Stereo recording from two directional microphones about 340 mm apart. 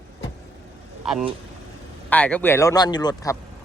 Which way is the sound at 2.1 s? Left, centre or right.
Centre.